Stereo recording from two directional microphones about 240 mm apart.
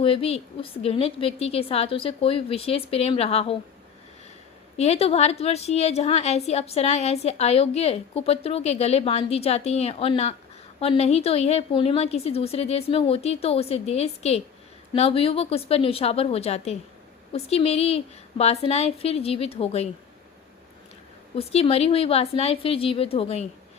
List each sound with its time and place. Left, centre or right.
0.0 s a woman's voice: left
4.8 s a woman's voice: left
21.3 s a woman's voice: left